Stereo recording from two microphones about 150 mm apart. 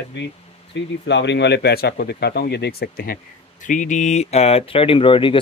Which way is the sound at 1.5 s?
90° left.